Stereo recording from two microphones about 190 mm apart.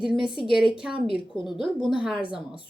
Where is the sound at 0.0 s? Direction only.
5° right (ahead or behind).